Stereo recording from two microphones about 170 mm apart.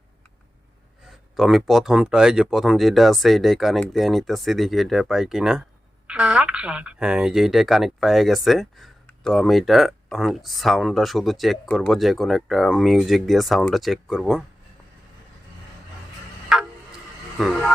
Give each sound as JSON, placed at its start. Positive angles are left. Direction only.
{"t": 1.0, "sound": "speech", "side_deg": 0}
{"t": 16.5, "sound": "tick-tock", "side_deg": -5}
{"t": 17.3, "sound": "speech", "side_deg": 0}